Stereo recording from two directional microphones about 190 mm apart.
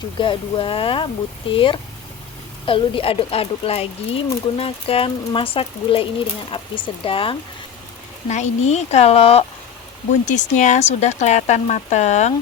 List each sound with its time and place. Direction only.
0.2 s speech: 25° left (ahead or behind)